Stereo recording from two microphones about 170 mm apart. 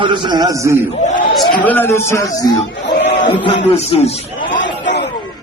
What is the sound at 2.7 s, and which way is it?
Crowd, 90° left.